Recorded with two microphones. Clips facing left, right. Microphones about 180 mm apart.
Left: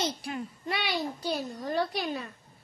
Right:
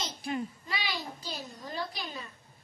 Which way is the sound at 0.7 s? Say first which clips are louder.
Left 5 dB; 70° left (ahead or behind).